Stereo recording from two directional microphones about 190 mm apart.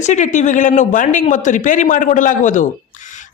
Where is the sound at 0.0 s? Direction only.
40° left (ahead or behind).